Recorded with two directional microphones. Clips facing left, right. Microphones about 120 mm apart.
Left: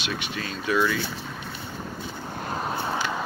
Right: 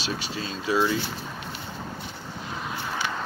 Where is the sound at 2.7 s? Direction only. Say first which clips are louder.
Left 3 dB; 30° left (ahead or behind).